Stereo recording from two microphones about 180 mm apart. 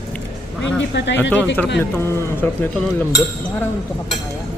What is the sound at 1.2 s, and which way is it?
A man's voice, 10° left (ahead or behind).